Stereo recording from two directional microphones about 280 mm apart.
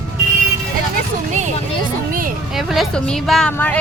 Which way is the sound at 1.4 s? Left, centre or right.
Right.